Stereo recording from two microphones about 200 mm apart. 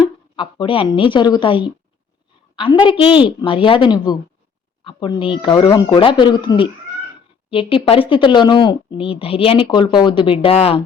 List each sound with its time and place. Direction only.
0.0 s a woman's voice: 25° left (ahead or behind)
2.8 s speech: 25° left (ahead or behind)